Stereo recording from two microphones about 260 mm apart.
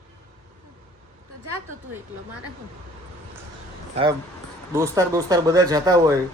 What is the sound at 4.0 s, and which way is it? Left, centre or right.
Speech, right.